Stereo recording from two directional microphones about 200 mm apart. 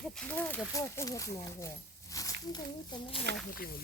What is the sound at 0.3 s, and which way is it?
Speech, 15° left (ahead or behind).